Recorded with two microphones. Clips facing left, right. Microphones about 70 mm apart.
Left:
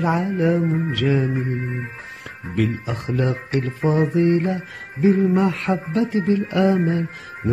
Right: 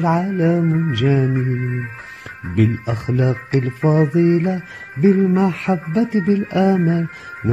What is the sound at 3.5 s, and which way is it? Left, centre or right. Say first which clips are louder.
Music: right 4 dB; right.